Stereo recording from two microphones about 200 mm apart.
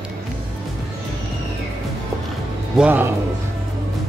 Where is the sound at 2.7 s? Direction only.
5° right (ahead or behind).